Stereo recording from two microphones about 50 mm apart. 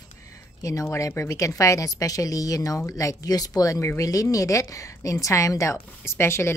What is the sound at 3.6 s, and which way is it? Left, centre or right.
Speech, left.